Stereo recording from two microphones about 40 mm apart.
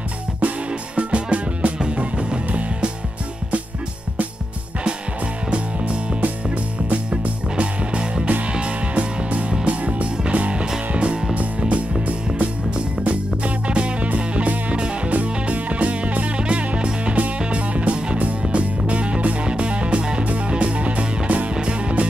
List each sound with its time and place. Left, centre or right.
0.9 s music: right
6.2 s music: right
12.4 s music: right